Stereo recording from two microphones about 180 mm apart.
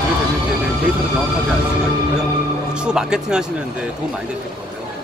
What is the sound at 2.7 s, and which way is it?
Speech, 5° right (ahead or behind).